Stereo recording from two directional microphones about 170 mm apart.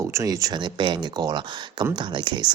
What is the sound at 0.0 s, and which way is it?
Speech, 15° right (ahead or behind).